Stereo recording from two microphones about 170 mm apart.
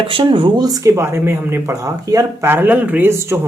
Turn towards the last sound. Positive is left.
turn(degrees=-15)  # may be behind; listen again after turning